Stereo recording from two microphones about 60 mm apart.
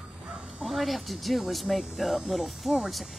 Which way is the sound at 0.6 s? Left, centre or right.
Centre.